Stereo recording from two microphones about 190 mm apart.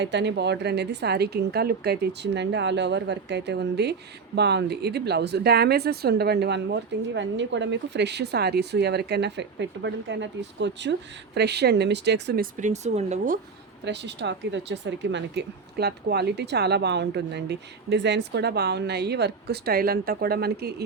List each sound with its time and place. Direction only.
0.0 s speech: 65° right (ahead or behind)
12.5 s speech: 40° right (ahead or behind)
13.8 s speech: 65° right (ahead or behind)